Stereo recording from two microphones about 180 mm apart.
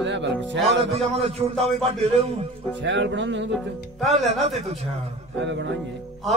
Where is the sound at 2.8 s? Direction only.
90° right.